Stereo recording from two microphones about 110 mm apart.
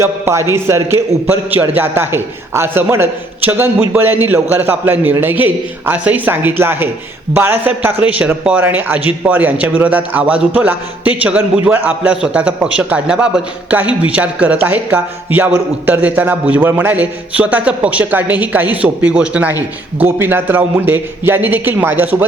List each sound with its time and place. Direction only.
0.0 s a man's voice: 25° right (ahead or behind)